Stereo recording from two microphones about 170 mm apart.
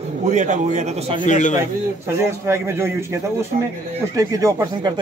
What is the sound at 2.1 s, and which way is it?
Speech, 15° right (ahead or behind).